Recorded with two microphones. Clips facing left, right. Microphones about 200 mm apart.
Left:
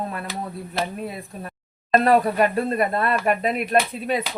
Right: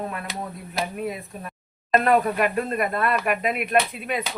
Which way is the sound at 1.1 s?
35° left (ahead or behind).